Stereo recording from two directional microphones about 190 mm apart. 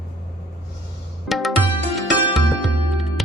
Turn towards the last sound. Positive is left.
turn(degrees=0)  # may be behind; listen again after turning